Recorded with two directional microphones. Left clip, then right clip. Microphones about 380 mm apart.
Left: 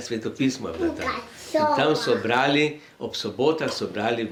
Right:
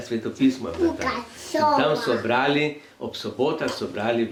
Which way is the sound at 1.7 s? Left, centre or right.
Left.